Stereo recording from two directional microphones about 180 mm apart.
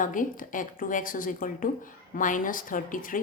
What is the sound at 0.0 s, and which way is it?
Speech, 45° left (ahead or behind).